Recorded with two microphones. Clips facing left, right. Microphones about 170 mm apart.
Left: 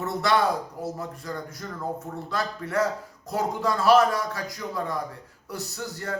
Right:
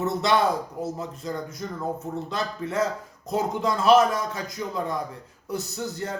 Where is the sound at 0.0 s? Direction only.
20° right (ahead or behind).